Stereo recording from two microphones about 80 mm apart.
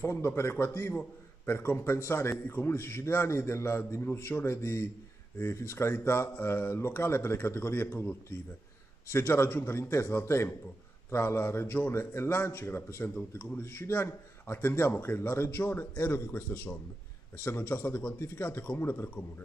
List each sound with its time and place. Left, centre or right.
0.0 s a man's voice: left